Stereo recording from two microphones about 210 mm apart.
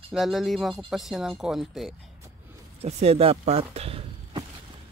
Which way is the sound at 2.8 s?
30° right (ahead or behind).